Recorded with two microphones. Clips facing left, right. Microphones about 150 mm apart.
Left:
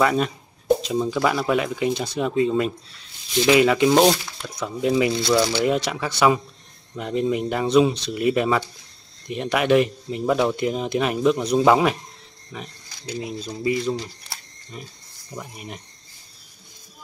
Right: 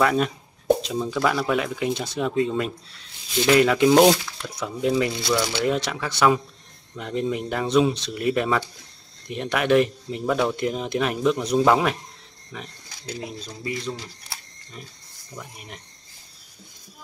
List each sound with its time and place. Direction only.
0.0 s speech: centre (ahead or behind)
15.3 s speech: 30° left (ahead or behind)